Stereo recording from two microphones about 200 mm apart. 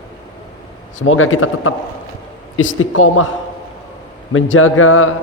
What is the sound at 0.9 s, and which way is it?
Speech, 85° left.